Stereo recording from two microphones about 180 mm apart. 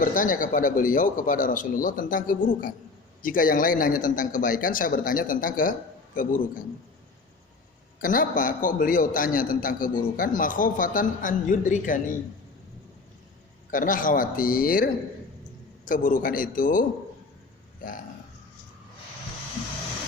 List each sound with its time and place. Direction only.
0.0 s a man's voice: 50° left (ahead or behind)
8.0 s a man's voice: 50° left (ahead or behind)
13.7 s a man's voice: 45° left (ahead or behind)
15.9 s a man's voice: 45° left (ahead or behind)